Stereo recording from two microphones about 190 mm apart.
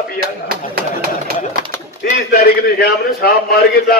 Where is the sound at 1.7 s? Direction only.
10° left (ahead or behind).